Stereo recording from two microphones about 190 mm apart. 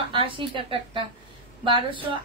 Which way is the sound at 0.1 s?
25° right (ahead or behind).